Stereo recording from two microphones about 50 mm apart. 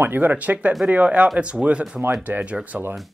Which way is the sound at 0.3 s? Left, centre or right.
Right.